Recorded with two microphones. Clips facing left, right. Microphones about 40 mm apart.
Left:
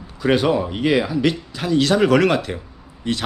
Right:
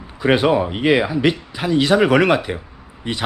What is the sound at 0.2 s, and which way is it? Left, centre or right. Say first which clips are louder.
A man's voice: right 2 dB; centre.